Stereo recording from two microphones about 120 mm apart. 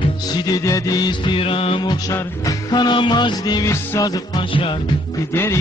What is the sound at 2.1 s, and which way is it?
Music, 35° left (ahead or behind).